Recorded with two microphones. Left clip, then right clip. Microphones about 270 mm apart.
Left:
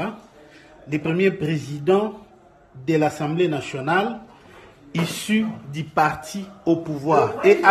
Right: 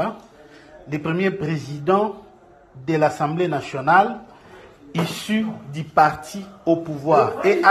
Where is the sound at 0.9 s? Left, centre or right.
Centre.